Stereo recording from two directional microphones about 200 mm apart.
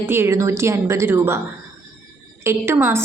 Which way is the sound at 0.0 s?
10° right (ahead or behind).